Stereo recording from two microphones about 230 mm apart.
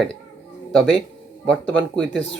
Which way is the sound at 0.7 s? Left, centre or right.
Centre.